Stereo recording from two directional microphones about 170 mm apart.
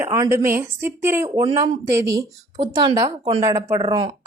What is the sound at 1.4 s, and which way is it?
Speech, 25° right (ahead or behind).